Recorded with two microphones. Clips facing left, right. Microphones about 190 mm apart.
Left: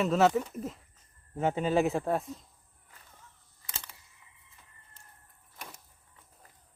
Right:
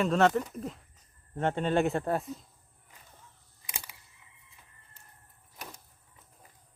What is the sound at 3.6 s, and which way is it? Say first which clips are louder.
Camera: right 1 dB; 10° right (ahead or behind).